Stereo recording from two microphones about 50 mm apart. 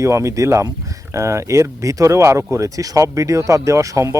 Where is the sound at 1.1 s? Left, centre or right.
Right.